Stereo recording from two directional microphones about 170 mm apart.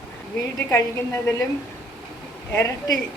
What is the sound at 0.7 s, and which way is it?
Speech, 15° left (ahead or behind).